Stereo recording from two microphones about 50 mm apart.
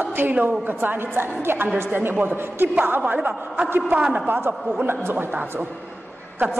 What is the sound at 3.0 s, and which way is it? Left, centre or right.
Speech, right.